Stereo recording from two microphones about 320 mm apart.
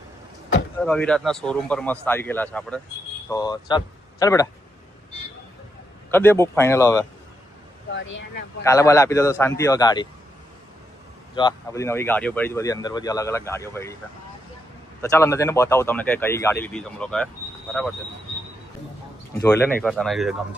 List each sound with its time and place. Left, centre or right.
0.8 s speech: centre
6.1 s speech: centre
7.9 s speech: left
8.6 s speech: centre
11.3 s speech: centre
15.0 s speech: centre
19.4 s speech: centre